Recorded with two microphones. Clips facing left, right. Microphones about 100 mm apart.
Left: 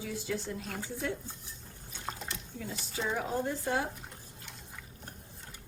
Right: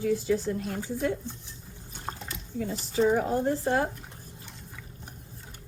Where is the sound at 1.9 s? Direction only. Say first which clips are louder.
Right 3 dB; 40° right (ahead or behind).